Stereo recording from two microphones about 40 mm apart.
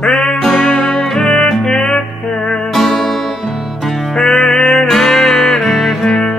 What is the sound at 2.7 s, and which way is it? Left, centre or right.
Music, centre.